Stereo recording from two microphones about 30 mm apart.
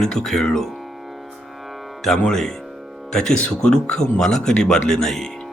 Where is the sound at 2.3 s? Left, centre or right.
Centre.